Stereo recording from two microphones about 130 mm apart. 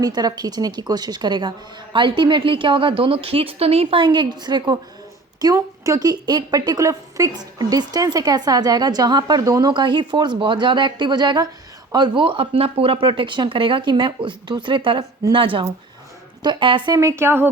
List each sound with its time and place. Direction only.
0.0 s a woman's voice: 30° right (ahead or behind)